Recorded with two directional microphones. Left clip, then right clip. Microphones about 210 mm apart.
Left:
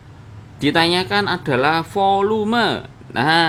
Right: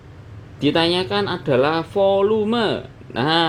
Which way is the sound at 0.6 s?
10° left (ahead or behind).